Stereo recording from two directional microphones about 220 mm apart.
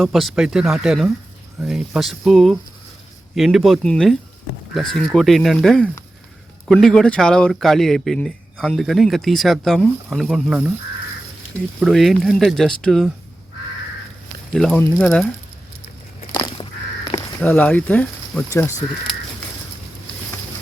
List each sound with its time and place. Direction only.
0.0 s speech: centre (ahead or behind)
11.8 s speech: centre (ahead or behind)
14.5 s speech: centre (ahead or behind)
16.3 s a sound: 15° left (ahead or behind)
17.4 s speech: 5° left (ahead or behind)